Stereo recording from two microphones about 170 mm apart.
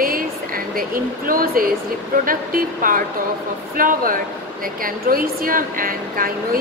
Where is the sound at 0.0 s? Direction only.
55° right (ahead or behind).